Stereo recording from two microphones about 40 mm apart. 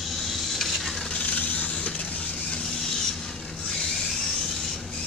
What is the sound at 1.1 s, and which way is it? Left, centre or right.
Vehicle, left.